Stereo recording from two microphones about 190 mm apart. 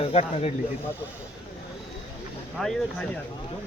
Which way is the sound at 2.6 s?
Centre (ahead or behind).